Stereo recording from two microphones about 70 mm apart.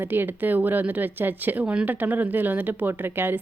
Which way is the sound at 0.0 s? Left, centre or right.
Right.